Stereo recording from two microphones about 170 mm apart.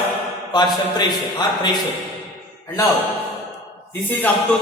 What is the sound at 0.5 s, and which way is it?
Speech, 25° left (ahead or behind).